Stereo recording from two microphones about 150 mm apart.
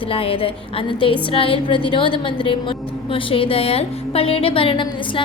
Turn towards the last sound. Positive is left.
turn(degrees=35)  # may be behind; listen again after turning